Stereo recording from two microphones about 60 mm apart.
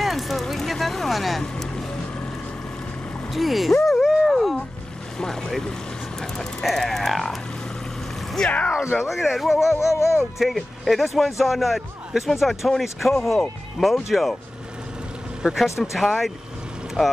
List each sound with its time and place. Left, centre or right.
0.0 s music: centre
1.4 s boat: centre
3.3 s a man's voice: centre
3.8 s a sound: centre
5.2 s a man's voice: centre
8.5 s speech: left
9.0 s a man's voice: centre
9.8 s music: left
10.4 s a man's voice: centre
15.4 s a man's voice: centre